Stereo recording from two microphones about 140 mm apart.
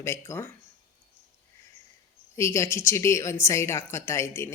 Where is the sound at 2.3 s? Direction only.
20° left (ahead or behind).